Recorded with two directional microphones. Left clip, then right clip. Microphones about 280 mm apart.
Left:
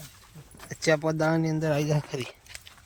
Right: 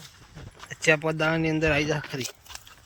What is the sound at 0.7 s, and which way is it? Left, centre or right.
Speech, centre.